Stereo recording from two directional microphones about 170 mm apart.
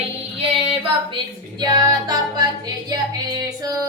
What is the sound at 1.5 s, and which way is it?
Music, 25° right (ahead or behind).